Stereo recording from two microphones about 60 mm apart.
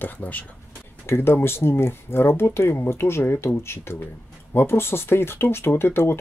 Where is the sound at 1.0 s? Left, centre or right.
Left.